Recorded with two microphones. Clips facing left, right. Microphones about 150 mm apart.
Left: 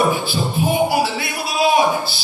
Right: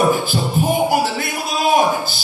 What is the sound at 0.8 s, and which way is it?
Music, 45° right (ahead or behind).